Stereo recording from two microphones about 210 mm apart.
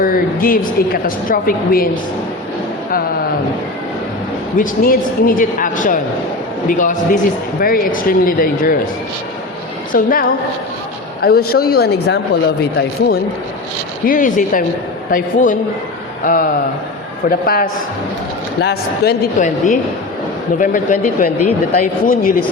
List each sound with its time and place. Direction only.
0.0 s a woman's voice: 45° left (ahead or behind)
4.5 s a man's voice: 40° left (ahead or behind)
9.9 s a man's voice: 40° left (ahead or behind)
14.1 s a man's voice: 40° left (ahead or behind)